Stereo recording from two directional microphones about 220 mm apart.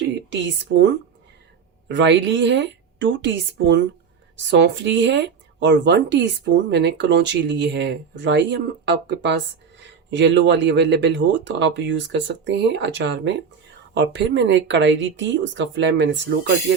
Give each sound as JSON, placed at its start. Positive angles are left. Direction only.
{"t": 0.3, "sound": "speech", "side_deg": -55}
{"t": 1.9, "sound": "speech", "side_deg": -55}